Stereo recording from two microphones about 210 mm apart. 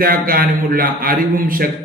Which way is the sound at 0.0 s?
45° right (ahead or behind).